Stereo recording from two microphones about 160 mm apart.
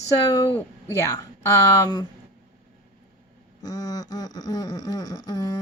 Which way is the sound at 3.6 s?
25° left (ahead or behind).